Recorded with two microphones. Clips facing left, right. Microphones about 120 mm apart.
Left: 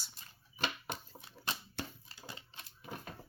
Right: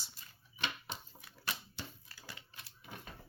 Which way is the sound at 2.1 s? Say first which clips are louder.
Left 3 dB; 25° left (ahead or behind).